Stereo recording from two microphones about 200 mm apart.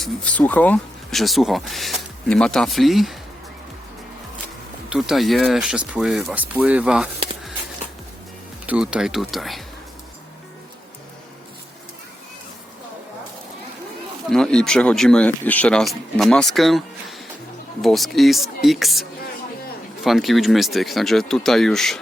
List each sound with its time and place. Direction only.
0.0 s speech: 5° left (ahead or behind)
4.9 s speech: centre (ahead or behind)
8.6 s speech: 5° right (ahead or behind)
14.3 s speech: 5° left (ahead or behind)
20.1 s speech: centre (ahead or behind)